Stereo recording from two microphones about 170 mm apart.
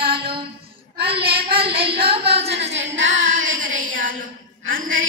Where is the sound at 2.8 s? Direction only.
45° right (ahead or behind).